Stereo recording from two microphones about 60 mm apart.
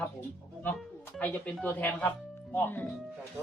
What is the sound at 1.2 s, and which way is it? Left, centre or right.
Speech, left.